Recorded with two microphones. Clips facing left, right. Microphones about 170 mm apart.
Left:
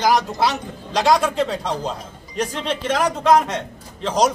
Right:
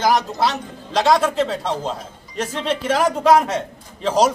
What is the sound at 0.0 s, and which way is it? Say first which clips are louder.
A man's voice: even; centre (ahead or behind).